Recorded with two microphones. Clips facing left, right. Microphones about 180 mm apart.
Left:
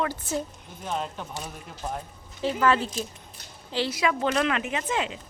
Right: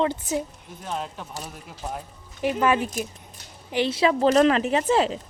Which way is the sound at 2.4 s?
15° right (ahead or behind).